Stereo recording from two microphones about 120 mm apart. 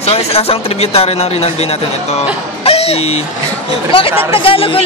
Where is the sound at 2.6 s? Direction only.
55° left (ahead or behind).